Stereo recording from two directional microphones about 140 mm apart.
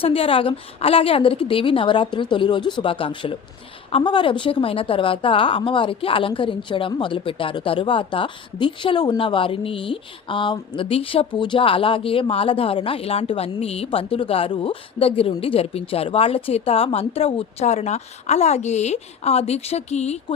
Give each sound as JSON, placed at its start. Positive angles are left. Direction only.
{"t": 0.0, "sound": "a woman's voice", "side_deg": 40}